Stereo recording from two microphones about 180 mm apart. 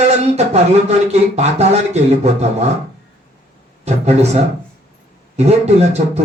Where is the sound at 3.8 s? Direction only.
35° right (ahead or behind).